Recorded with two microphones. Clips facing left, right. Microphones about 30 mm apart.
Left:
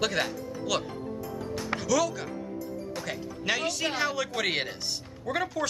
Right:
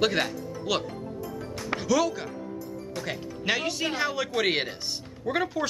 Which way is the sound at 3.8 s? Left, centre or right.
Centre.